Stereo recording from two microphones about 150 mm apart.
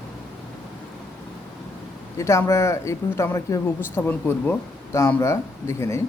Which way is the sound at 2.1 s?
20° left (ahead or behind).